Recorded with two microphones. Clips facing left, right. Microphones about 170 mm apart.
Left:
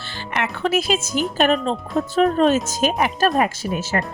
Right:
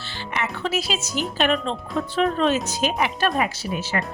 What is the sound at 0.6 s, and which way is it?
A woman's voice, 55° left (ahead or behind).